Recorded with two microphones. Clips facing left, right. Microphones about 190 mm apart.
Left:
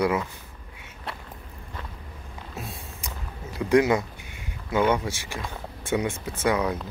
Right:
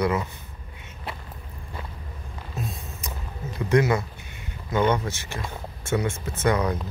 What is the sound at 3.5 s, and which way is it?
Speech, 15° left (ahead or behind).